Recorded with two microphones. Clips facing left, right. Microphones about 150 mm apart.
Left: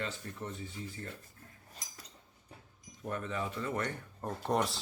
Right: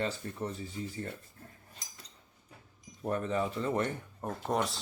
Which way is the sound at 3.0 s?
35° right (ahead or behind).